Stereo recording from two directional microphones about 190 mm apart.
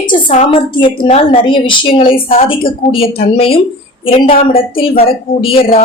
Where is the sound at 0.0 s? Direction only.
25° left (ahead or behind).